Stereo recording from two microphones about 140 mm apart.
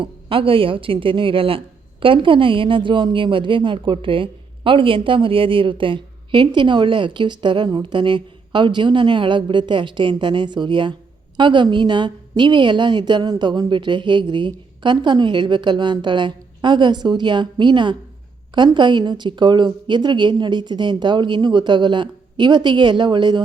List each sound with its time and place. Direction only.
0.0 s speech: 40° right (ahead or behind)